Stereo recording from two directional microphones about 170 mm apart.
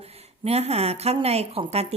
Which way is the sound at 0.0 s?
35° right (ahead or behind).